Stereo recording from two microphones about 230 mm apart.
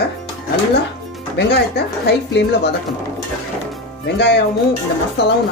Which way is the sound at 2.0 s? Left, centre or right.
Left.